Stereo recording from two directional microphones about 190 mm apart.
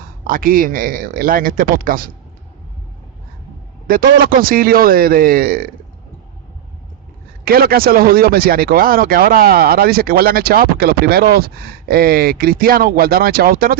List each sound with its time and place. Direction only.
0.0 s speech: 50° right (ahead or behind)
3.8 s speech: 50° right (ahead or behind)
7.4 s speech: 50° right (ahead or behind)